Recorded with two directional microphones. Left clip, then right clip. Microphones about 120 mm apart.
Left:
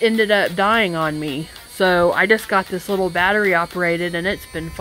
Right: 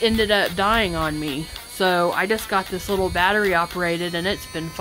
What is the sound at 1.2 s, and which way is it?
Speech, 35° right (ahead or behind).